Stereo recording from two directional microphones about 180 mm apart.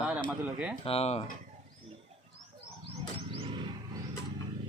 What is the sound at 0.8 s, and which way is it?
Speech, 35° left (ahead or behind).